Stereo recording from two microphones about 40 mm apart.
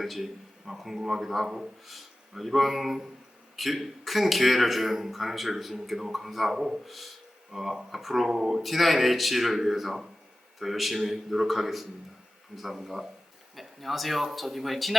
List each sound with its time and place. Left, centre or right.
0.0 s a man's voice: centre
8.3 s speech: centre
8.6 s a man's voice: centre